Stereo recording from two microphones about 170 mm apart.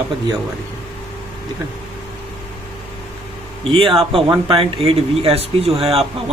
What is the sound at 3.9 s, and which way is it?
A man's voice, 30° right (ahead or behind).